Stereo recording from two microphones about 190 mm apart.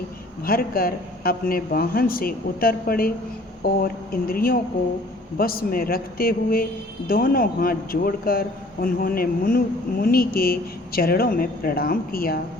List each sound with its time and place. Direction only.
0.4 s speech: 50° left (ahead or behind)